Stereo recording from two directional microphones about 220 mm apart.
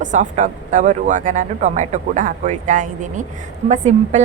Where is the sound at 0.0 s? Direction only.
35° right (ahead or behind).